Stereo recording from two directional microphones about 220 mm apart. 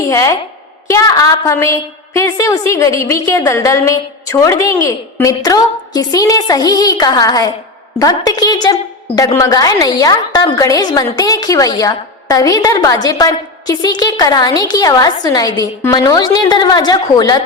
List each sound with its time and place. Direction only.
0.1 s a woman's voice: 15° left (ahead or behind)